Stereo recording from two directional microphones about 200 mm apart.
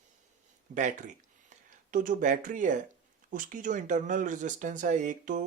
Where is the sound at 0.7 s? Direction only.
40° right (ahead or behind).